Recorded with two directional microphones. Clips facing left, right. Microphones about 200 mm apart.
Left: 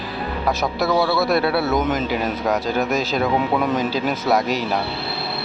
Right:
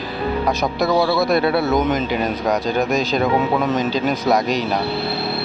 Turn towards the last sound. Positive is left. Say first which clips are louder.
# right 2 dB
turn(degrees=5)  # may be behind; listen again after turning